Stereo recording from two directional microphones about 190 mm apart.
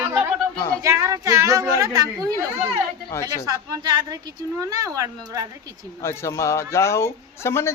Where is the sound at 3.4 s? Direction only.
20° right (ahead or behind).